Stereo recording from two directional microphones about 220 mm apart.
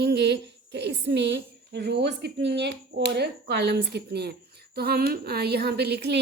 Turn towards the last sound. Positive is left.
turn(degrees=-50)  # may be behind; listen again after turning